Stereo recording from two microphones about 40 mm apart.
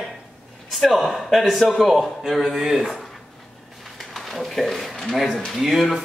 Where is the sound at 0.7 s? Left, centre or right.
Centre.